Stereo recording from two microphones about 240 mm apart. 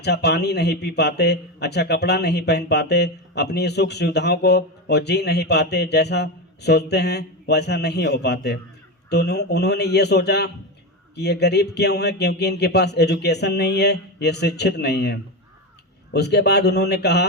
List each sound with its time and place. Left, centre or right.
0.0 s a man's voice: left